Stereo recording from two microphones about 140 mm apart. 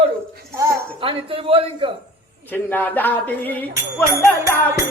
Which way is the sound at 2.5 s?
15° left (ahead or behind).